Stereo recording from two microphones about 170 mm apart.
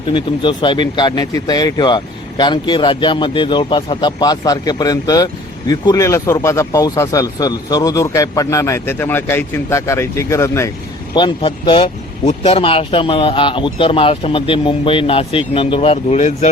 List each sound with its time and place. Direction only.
0.1 s speech: 30° left (ahead or behind)
11.1 s speech: 25° left (ahead or behind)